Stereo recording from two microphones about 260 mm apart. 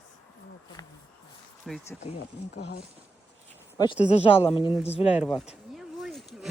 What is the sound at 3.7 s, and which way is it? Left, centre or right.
Speech, centre.